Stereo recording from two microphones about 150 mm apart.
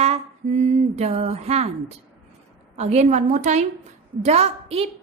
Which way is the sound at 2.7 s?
45° right (ahead or behind).